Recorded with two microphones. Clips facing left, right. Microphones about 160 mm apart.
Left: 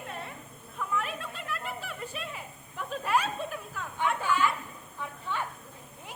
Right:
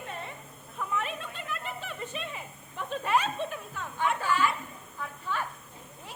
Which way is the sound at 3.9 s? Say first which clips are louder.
Even; 15° left (ahead or behind).